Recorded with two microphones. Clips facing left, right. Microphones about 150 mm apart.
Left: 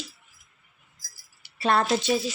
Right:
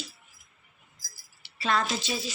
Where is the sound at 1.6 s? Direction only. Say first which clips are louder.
Left 5 dB; 60° left (ahead or behind).